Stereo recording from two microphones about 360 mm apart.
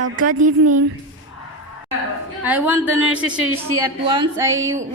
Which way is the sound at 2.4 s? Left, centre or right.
Centre.